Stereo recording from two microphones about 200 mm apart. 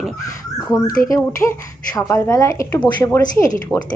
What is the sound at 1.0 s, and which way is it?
A woman's voice, 15° left (ahead or behind).